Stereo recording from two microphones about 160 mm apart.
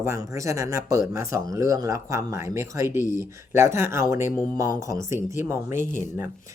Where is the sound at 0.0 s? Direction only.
20° right (ahead or behind).